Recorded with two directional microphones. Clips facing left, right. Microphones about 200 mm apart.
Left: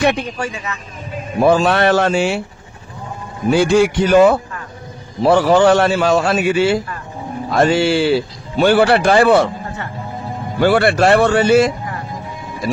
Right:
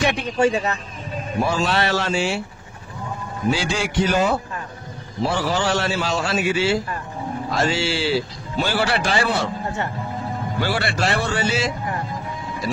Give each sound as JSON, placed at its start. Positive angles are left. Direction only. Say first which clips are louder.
{"t": 0.4, "sound": "speech", "louder": "right 6 dB", "side_deg": -30}
{"t": 1.4, "sound": "speech", "louder": "left 9 dB", "side_deg": 55}
{"t": 3.4, "sound": "speech", "louder": "left 10 dB", "side_deg": 55}
{"t": 10.6, "sound": "speech", "louder": "left 11 dB", "side_deg": 55}